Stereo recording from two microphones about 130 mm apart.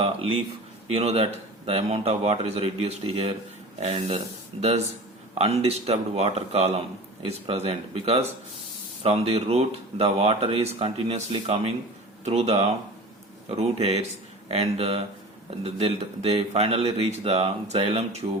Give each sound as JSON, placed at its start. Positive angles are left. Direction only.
{"t": 0.0, "sound": "a man's voice", "side_deg": -50}